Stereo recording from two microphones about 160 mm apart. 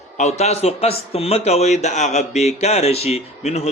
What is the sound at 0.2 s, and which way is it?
A man's voice, 45° left (ahead or behind).